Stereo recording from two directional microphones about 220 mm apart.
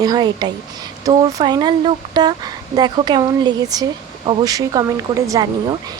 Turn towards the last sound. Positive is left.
turn(degrees=-15)  # may be behind; listen again after turning